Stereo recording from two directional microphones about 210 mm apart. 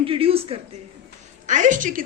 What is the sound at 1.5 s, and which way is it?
Speech, 35° right (ahead or behind).